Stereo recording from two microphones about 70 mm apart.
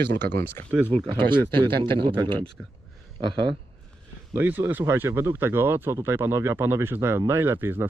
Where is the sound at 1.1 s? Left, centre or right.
Right.